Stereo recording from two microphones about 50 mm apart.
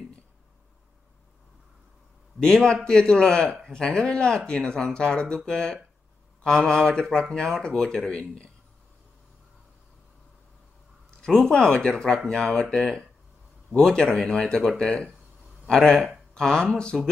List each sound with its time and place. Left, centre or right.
2.4 s speech: centre
11.1 s a sound: centre
11.3 s speech: centre